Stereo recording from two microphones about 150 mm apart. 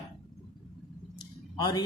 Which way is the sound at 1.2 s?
30° left (ahead or behind).